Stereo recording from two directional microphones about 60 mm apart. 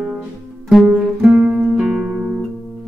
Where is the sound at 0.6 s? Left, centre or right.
Centre.